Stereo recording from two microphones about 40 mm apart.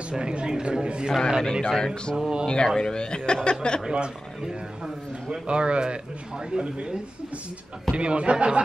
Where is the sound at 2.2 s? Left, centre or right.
Centre.